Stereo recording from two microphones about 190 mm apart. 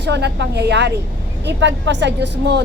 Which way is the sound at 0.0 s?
65° right (ahead or behind).